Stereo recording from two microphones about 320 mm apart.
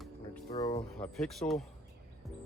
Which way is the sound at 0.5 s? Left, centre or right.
Centre.